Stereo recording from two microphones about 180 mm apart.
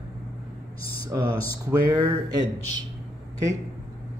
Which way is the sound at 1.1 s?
15° right (ahead or behind).